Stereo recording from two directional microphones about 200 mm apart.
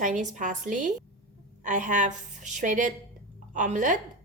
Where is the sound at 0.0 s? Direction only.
40° right (ahead or behind).